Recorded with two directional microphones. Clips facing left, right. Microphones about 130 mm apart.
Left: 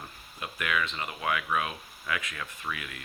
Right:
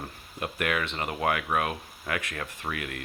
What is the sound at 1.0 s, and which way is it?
Speech, 50° right (ahead or behind).